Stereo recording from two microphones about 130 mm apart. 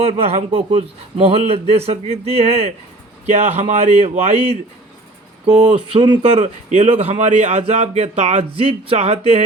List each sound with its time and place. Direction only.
0.0 s speech: 50° right (ahead or behind)